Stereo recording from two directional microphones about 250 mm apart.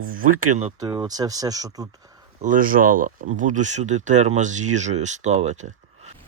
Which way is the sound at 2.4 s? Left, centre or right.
Right.